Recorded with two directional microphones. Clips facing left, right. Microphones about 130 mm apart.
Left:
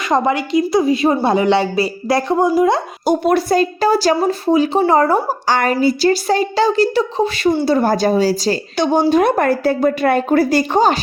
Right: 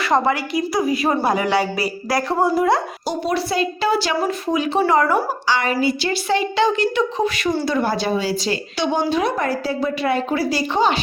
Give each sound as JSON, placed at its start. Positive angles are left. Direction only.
{"t": 0.1, "sound": "a woman's voice", "side_deg": 20}
{"t": 3.1, "sound": "a woman's voice", "side_deg": 50}
{"t": 5.5, "sound": "a woman's voice", "side_deg": 50}